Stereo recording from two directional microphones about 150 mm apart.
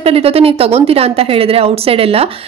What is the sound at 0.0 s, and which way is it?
A woman's voice, 40° right (ahead or behind).